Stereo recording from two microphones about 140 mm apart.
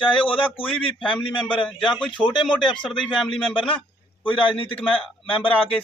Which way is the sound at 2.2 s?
35° left (ahead or behind).